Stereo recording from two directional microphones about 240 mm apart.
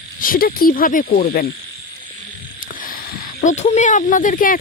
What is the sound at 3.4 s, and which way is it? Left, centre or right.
Speech, left.